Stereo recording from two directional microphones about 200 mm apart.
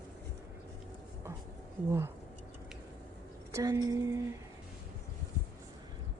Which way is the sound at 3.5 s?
15° right (ahead or behind).